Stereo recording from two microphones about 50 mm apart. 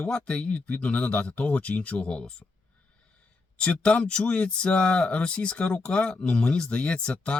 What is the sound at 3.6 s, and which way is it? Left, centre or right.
Speech, centre.